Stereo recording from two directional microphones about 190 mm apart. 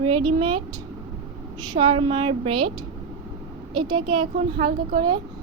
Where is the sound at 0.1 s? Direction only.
30° right (ahead or behind).